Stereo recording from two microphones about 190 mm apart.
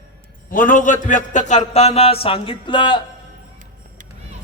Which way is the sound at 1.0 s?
40° left (ahead or behind).